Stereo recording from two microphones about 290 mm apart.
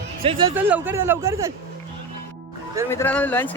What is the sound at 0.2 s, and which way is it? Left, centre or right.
Speech, centre.